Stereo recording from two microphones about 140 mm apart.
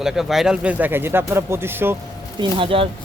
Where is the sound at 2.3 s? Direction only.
35° right (ahead or behind).